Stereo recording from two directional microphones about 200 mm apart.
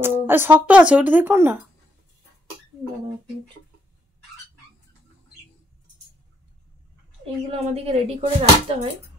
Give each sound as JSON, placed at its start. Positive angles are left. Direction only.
{"t": 0.0, "sound": "speech", "side_deg": -10}
{"t": 7.7, "sound": "dishes", "side_deg": -30}